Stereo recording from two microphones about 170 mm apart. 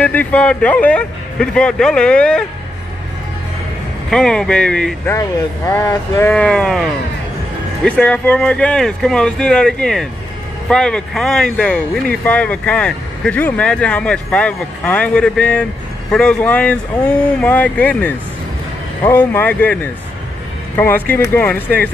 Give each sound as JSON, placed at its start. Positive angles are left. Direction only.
{"t": 0.0, "sound": "speech", "side_deg": 10}
{"t": 4.1, "sound": "speech", "side_deg": 5}
{"t": 5.7, "sound": "speech", "side_deg": 15}